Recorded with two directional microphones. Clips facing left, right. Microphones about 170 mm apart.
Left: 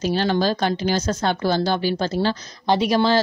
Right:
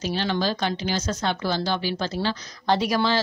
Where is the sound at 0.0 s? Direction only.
45° left (ahead or behind).